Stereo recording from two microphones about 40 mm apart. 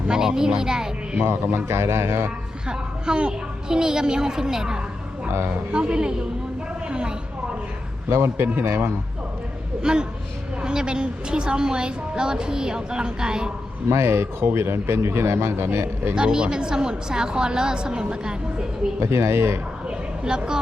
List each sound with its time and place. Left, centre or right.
0.1 s a woman's voice: centre
1.2 s speech: right
2.6 s a woman's voice: right
6.8 s vehicle: right
9.8 s a woman's voice: centre
13.8 s speech: right
16.1 s a woman's voice: right
19.0 s speech: right
19.9 s a sound: right